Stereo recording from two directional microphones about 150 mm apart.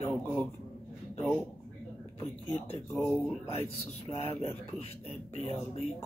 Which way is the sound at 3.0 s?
Centre (ahead or behind).